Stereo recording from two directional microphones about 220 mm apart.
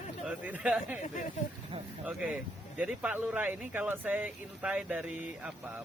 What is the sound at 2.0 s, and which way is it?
Speech, 5° right (ahead or behind).